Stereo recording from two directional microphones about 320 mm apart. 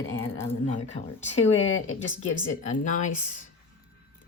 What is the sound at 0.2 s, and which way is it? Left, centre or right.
Speech, centre.